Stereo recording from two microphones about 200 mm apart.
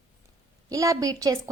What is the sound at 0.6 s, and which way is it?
Speech, 15° right (ahead or behind).